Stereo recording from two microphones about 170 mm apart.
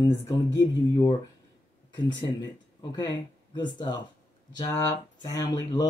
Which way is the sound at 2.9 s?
25° left (ahead or behind).